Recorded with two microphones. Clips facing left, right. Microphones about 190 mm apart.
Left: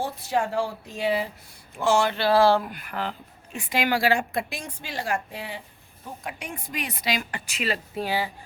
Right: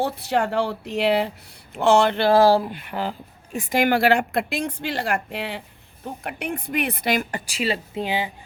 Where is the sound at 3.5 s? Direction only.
45° right (ahead or behind); by 5.6 s 75° right (ahead or behind).